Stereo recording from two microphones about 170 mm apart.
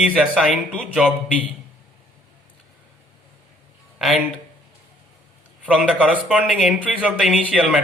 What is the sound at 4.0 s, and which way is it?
Speech, centre (ahead or behind).